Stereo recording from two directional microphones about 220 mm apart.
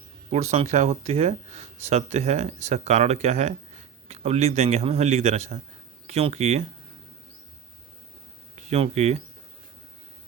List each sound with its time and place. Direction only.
0.3 s speech: 30° right (ahead or behind)
8.7 s speech: 30° right (ahead or behind)